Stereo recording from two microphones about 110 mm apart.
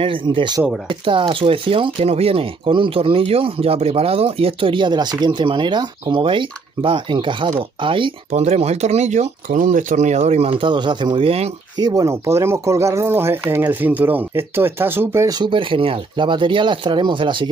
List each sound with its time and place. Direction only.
0.0 s speech: 50° right (ahead or behind)
8.3 s speech: 80° right; by 11.2 s 45° right (ahead or behind)
11.2 s speech: 70° right (ahead or behind)
11.7 s speech: 35° right (ahead or behind); by 15.2 s 20° right (ahead or behind)
15.2 s speech: 40° right (ahead or behind)